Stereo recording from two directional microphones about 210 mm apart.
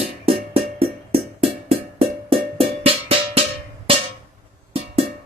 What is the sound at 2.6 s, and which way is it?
Music, 25° right (ahead or behind).